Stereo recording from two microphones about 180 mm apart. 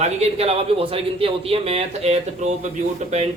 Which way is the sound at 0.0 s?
35° right (ahead or behind).